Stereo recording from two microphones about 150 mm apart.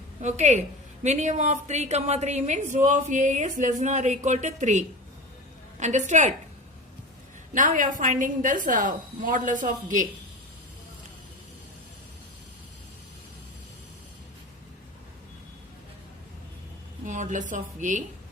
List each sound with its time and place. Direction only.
0.2 s a woman's voice: 50° right (ahead or behind)
7.5 s a woman's voice: 60° right (ahead or behind)
17.1 s a woman's voice: 55° right (ahead or behind)